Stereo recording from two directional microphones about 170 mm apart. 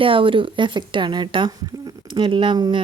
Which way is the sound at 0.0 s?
30° right (ahead or behind).